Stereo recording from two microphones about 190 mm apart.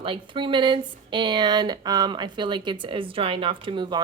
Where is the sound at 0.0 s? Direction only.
25° right (ahead or behind).